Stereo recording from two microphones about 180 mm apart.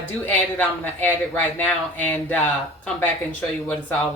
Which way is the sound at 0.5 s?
10° left (ahead or behind).